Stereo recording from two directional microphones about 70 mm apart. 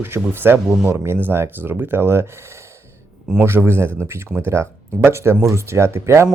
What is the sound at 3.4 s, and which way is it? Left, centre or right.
Speech, right.